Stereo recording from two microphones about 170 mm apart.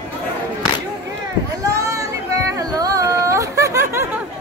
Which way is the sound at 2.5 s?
20° right (ahead or behind).